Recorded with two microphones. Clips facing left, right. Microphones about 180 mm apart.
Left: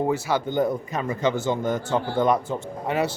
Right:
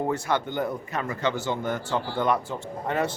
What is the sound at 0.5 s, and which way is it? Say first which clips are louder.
Speech: left 5 dB; 20° left (ahead or behind).